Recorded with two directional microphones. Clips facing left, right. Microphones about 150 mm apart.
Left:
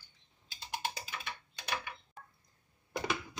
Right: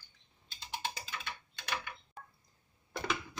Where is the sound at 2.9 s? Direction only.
15° left (ahead or behind).